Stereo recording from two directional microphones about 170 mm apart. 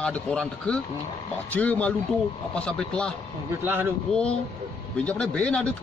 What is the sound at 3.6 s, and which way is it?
Speech, 10° right (ahead or behind).